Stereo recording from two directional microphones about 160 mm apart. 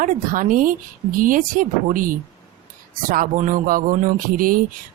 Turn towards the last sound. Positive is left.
turn(degrees=-60)  # may be behind; listen again after turning